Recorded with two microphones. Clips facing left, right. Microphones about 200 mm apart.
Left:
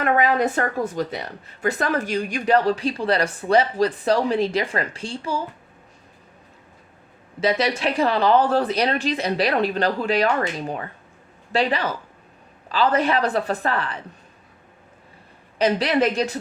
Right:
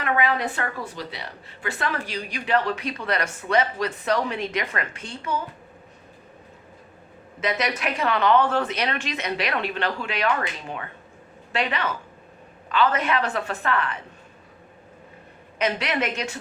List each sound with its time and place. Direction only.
0.0 s a woman's voice: 45° left (ahead or behind)
7.4 s a woman's voice: 30° left (ahead or behind)
15.5 s a woman's voice: 35° left (ahead or behind)